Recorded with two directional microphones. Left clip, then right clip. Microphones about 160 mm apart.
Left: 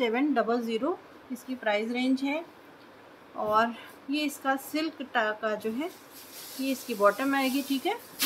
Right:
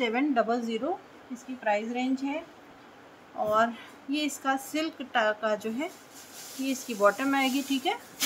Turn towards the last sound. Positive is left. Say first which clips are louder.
# right 1 dB
turn(degrees=-5)  # may be behind; listen again after turning